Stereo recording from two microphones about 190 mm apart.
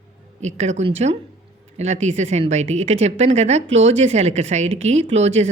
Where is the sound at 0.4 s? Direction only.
35° right (ahead or behind).